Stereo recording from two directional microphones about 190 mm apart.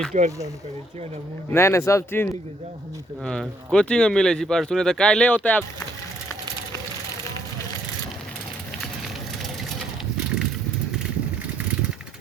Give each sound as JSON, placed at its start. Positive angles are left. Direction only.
{"t": 0.1, "sound": "speech", "side_deg": -40}
{"t": 1.5, "sound": "speech", "side_deg": 15}